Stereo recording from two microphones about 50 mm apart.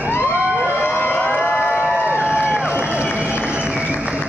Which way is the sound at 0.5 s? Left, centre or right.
Centre.